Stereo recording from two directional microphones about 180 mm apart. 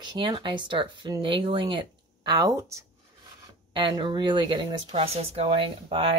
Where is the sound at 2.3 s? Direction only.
20° right (ahead or behind).